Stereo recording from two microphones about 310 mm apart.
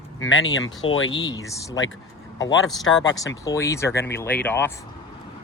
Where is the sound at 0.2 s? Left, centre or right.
Left.